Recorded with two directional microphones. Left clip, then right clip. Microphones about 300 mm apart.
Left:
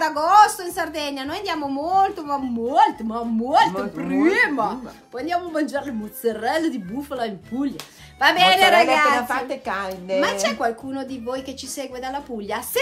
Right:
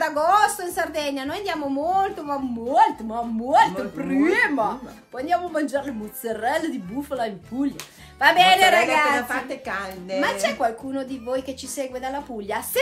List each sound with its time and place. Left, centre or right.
0.0 s a woman's voice: centre